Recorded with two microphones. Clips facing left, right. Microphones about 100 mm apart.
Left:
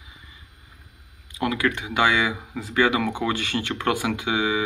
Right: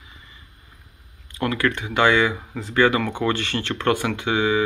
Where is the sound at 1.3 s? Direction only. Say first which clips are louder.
Right 1 dB; 10° left (ahead or behind).